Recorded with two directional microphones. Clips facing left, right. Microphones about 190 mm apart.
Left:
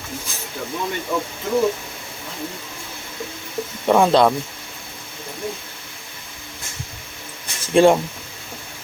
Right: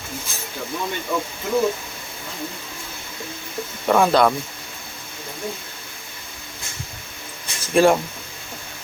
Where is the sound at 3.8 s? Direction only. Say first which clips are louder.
Left 2 dB; 20° left (ahead or behind).